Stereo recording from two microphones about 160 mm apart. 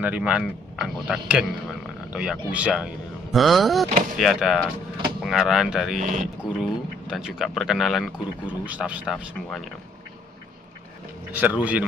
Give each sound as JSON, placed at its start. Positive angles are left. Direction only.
{"t": 0.0, "sound": "speech", "side_deg": -10}
{"t": 5.9, "sound": "speech", "side_deg": -50}
{"t": 6.6, "sound": "speech", "side_deg": -5}
{"t": 11.3, "sound": "speech", "side_deg": -10}